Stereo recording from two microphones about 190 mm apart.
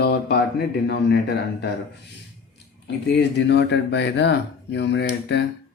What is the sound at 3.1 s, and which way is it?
Speech, 60° left (ahead or behind).